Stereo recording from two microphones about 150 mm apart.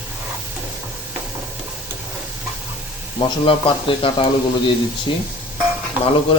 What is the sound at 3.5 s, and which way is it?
Speech, 35° left (ahead or behind).